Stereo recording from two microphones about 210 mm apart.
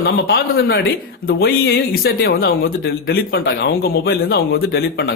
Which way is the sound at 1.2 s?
50° left (ahead or behind).